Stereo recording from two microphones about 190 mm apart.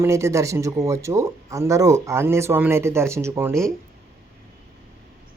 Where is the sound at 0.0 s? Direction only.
15° right (ahead or behind).